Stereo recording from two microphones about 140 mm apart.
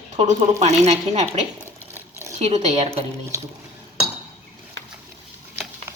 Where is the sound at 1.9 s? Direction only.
20° right (ahead or behind).